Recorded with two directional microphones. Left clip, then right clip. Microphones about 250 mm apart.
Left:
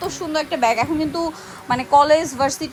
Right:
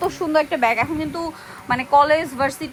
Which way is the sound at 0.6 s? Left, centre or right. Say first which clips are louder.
Left 1 dB; centre.